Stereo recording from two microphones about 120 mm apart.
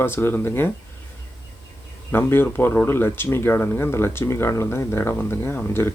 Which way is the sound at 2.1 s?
20° left (ahead or behind).